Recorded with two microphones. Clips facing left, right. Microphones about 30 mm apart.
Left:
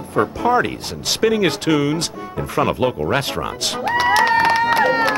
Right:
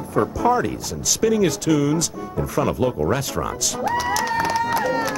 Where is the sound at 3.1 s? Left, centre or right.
Left.